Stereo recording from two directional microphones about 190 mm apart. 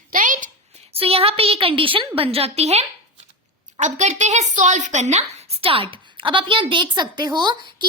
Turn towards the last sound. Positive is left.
turn(degrees=-25)  # may be behind; listen again after turning